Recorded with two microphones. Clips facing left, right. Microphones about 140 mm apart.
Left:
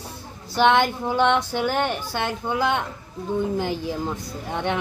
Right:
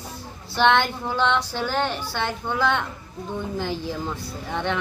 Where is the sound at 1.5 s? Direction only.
15° left (ahead or behind).